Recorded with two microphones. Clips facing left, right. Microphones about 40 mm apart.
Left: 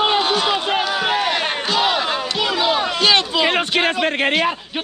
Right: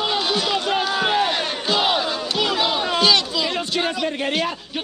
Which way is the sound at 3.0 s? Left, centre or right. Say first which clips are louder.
Left 2 dB; left.